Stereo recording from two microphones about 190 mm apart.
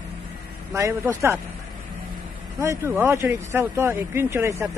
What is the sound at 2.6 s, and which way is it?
Speech, 15° right (ahead or behind).